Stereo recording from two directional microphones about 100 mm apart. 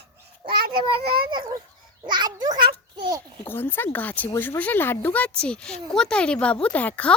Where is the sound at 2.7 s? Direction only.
50° right (ahead or behind).